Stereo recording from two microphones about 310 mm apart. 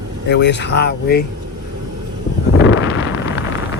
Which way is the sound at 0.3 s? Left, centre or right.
Left.